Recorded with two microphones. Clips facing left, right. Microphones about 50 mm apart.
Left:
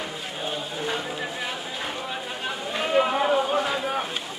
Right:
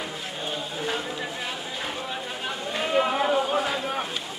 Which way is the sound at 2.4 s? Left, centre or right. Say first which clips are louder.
Left 1 dB; centre.